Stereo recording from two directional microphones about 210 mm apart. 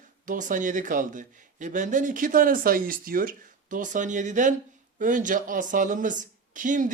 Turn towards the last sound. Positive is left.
turn(degrees=-40)  # may be behind; listen again after turning